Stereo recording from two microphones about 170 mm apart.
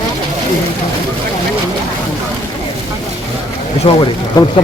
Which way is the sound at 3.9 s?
30° left (ahead or behind).